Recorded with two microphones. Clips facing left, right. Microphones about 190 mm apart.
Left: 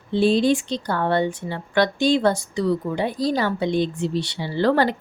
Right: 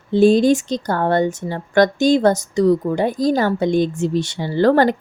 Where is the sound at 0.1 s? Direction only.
45° right (ahead or behind).